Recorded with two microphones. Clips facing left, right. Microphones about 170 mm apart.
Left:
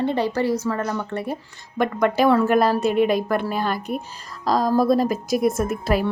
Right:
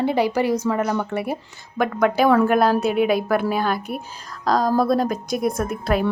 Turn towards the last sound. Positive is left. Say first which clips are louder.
# even
turn(degrees=0)  # may be behind; listen again after turning